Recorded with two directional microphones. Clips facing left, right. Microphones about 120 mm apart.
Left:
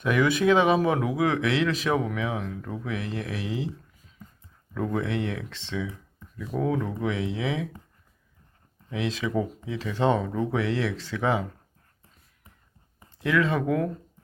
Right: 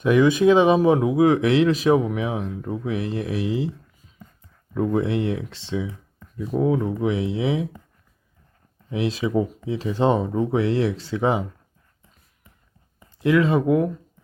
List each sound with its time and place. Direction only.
0.0 s speech: 25° right (ahead or behind)
1.3 s speech: 40° right (ahead or behind)
1.7 s speech: 20° right (ahead or behind)
4.7 s speech: 20° right (ahead or behind)
8.9 s speech: 20° right (ahead or behind)
11.1 s speech: 25° right (ahead or behind)
13.2 s speech: 20° right (ahead or behind)